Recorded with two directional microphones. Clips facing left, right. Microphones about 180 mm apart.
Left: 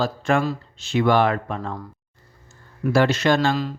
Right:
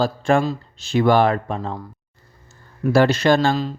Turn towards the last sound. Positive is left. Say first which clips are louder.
# right 3 dB
turn(degrees=-30)  # may be behind; listen again after turning